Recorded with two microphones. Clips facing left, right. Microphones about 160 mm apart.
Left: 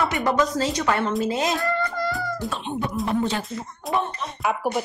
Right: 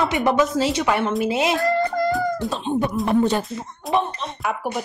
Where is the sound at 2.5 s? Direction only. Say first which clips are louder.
Right 6 dB; 35° right (ahead or behind).